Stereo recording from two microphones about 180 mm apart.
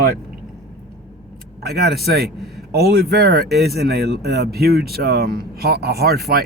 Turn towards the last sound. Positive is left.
turn(degrees=-60)  # may be behind; listen again after turning